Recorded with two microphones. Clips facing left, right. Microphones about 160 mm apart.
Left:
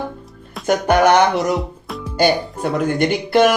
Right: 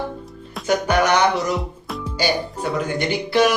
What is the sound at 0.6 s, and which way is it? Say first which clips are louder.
Speech: left 4 dB; 55° left (ahead or behind).